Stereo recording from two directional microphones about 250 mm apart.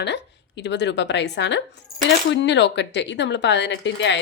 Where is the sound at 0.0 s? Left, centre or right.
Left.